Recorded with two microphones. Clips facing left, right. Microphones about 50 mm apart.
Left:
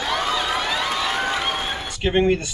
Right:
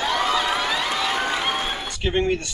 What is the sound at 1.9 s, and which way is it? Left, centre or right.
Speech, centre.